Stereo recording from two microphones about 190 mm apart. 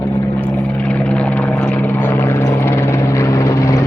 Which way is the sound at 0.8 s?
5° left (ahead or behind).